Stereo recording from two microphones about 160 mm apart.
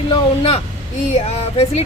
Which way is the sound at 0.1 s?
35° left (ahead or behind).